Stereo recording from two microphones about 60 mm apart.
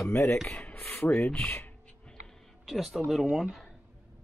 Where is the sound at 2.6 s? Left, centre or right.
Centre.